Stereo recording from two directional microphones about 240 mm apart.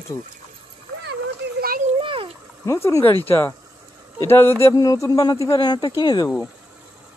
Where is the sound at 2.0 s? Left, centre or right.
Right.